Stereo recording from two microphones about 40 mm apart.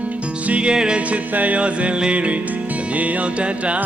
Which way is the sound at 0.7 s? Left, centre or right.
Right.